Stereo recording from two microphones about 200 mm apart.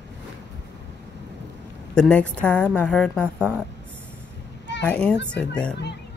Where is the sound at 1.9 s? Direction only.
5° left (ahead or behind).